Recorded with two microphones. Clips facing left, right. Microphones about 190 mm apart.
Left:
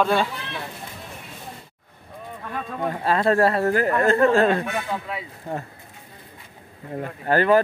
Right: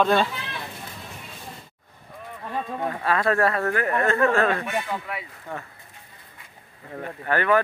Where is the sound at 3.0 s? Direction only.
30° left (ahead or behind).